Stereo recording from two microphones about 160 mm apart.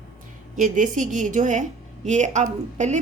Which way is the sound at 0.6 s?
55° right (ahead or behind).